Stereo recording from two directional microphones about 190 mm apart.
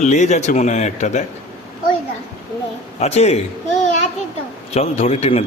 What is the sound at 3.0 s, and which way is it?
Speech, 35° left (ahead or behind).